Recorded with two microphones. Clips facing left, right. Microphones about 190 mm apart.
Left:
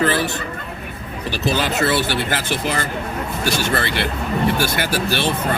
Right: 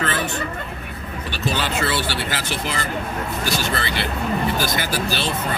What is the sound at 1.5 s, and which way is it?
Speech, 45° left (ahead or behind).